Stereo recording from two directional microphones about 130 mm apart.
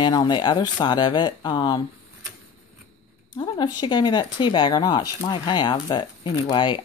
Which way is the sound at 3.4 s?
35° left (ahead or behind).